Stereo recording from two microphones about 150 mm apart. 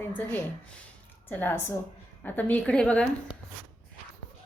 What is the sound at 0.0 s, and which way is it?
A woman's voice, 10° left (ahead or behind).